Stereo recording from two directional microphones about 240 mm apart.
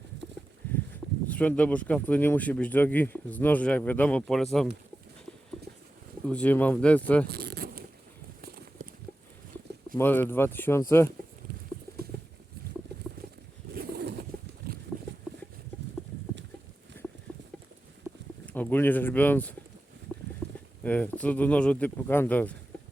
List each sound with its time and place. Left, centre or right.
1.3 s speech: centre
6.2 s speech: centre
7.3 s zipper: right
8.4 s a sound: right
10.0 s speech: centre
13.7 s a sound: right
17.3 s clip-clop: centre
18.4 s speech: centre
20.8 s speech: centre